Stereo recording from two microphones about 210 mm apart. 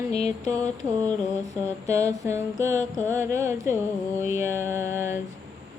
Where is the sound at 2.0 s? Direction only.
15° right (ahead or behind).